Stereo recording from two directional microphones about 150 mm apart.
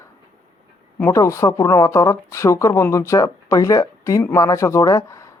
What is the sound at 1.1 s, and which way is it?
Speech, 20° left (ahead or behind).